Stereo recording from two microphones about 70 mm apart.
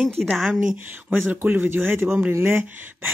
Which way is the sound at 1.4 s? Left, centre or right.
Right.